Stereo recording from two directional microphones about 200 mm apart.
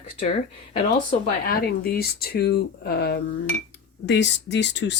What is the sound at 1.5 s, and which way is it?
Speech, 50° left (ahead or behind).